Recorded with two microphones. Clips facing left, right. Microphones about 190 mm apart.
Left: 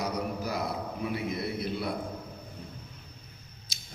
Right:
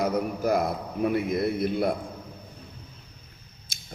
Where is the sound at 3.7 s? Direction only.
50° right (ahead or behind).